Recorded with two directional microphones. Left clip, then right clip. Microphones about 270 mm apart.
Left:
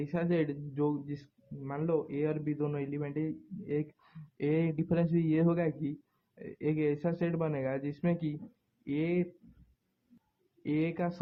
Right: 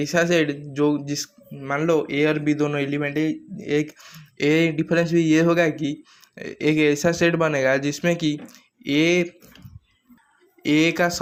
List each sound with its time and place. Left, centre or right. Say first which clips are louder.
0.0 s a man's voice: right 13 dB; centre
10.6 s a man's voice: right 14 dB; centre